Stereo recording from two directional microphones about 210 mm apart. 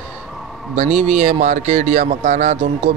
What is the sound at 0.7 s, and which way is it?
Speech, 35° right (ahead or behind).